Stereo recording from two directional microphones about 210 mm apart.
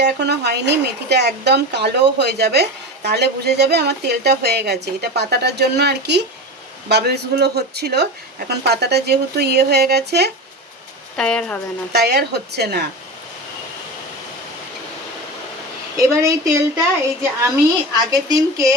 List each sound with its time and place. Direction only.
0.0 s speech: 50° right (ahead or behind)
11.2 s speech: 5° left (ahead or behind)
11.9 s speech: 50° right (ahead or behind)
16.0 s a woman's voice: 15° right (ahead or behind)
18.1 s a woman's voice: 15° right (ahead or behind)